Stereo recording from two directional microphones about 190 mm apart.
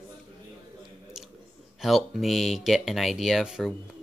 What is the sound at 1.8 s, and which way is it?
Speech, centre (ahead or behind).